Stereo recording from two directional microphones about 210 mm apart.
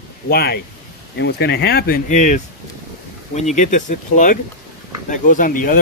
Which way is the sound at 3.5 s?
35° left (ahead or behind).